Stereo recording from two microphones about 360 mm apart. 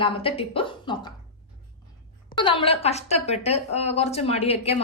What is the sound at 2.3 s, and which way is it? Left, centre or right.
Speech, centre.